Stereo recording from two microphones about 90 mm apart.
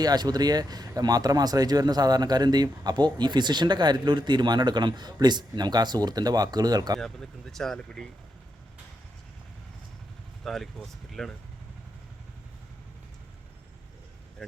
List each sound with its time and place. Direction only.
0.0 s speech: 50° right (ahead or behind)
7.0 s speech: 5° left (ahead or behind)
10.4 s speech: 5° left (ahead or behind)